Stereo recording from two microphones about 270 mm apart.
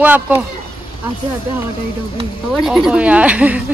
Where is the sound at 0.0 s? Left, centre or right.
Centre.